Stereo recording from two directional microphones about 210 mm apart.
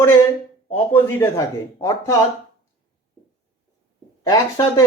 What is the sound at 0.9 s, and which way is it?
A man's voice, 15° left (ahead or behind).